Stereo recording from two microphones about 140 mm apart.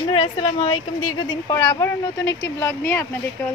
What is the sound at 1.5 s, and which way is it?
Speech, 30° left (ahead or behind).